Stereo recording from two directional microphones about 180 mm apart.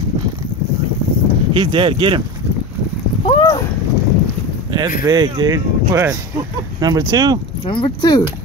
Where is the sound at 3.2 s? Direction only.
25° left (ahead or behind).